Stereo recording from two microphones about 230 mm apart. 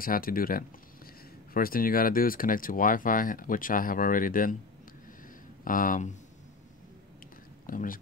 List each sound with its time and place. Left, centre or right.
0.0 s speech: left
5.6 s speech: left
7.6 s speech: left